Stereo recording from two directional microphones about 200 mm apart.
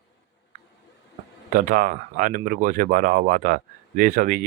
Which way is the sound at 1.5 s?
45° right (ahead or behind).